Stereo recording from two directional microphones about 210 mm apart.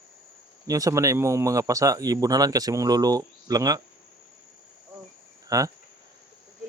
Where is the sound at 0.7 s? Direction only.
15° right (ahead or behind).